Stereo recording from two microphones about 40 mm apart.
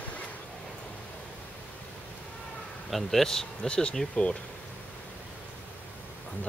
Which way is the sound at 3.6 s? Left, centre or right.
Left.